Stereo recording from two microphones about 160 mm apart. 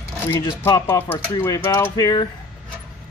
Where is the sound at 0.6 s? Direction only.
15° left (ahead or behind).